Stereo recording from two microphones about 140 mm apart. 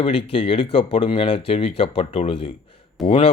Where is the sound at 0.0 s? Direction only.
40° left (ahead or behind).